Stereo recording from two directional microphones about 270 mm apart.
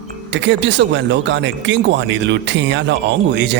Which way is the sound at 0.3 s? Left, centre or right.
Right.